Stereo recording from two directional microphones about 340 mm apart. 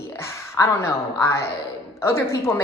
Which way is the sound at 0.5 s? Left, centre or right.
Centre.